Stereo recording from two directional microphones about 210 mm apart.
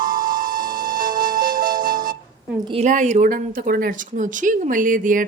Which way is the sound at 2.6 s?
30° right (ahead or behind).